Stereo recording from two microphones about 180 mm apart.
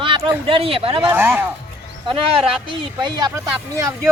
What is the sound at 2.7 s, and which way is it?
A man's voice, 25° right (ahead or behind).